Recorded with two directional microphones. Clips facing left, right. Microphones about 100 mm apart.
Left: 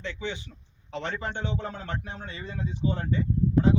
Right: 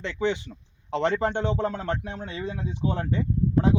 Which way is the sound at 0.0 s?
70° right (ahead or behind).